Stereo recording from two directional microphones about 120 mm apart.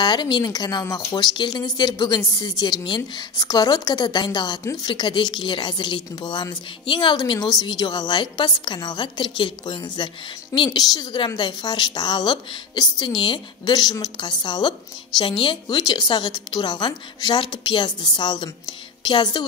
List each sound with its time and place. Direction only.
0.0 s speech: 40° left (ahead or behind)